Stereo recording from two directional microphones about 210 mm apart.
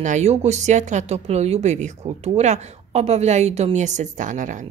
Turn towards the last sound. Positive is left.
turn(degrees=-35)  # may be behind; listen again after turning